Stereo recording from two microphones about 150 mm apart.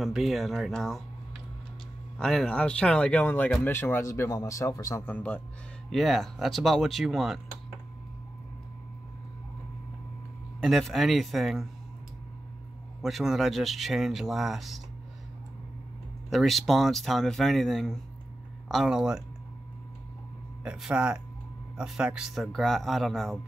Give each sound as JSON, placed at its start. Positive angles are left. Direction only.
{"t": 0.0, "sound": "speech", "side_deg": 0}
{"t": 5.0, "sound": "speech", "side_deg": 10}
{"t": 10.6, "sound": "speech", "side_deg": 0}
{"t": 13.0, "sound": "speech", "side_deg": 0}
{"t": 16.3, "sound": "speech", "side_deg": 0}
{"t": 20.6, "sound": "speech", "side_deg": -5}